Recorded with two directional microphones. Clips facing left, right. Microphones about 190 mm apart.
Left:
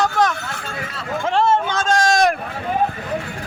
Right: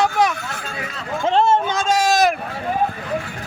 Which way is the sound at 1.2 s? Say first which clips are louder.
Right 2 dB; 20° right (ahead or behind).